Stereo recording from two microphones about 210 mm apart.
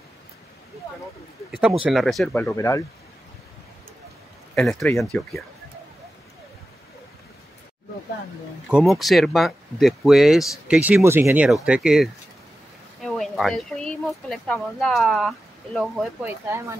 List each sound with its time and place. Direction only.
1.9 s speech: centre (ahead or behind)
4.6 s speech: 5° left (ahead or behind)
8.6 s speech: centre (ahead or behind)